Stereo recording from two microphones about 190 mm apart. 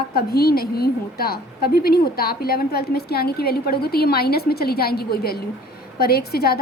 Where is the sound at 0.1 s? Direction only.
55° left (ahead or behind).